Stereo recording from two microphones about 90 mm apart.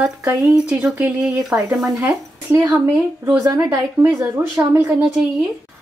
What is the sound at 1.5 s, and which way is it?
Speech, 30° right (ahead or behind).